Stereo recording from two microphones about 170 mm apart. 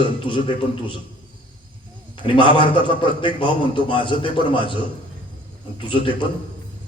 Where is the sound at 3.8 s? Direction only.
30° left (ahead or behind).